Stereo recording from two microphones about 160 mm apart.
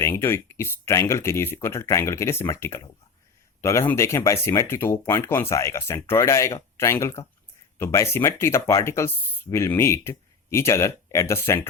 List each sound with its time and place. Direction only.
0.0 s speech: 15° left (ahead or behind)